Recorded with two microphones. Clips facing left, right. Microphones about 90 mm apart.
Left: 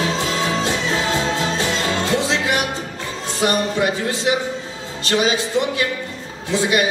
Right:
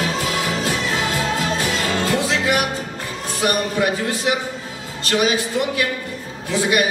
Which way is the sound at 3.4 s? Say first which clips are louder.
Left 1 dB; 25° left (ahead or behind).